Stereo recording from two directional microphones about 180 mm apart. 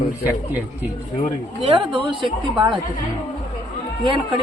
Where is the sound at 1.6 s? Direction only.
30° right (ahead or behind).